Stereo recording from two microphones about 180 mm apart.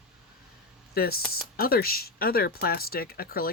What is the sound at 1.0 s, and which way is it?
Speech, 55° left (ahead or behind).